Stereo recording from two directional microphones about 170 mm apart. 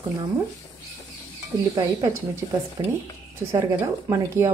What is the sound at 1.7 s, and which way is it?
A woman's voice, 20° right (ahead or behind).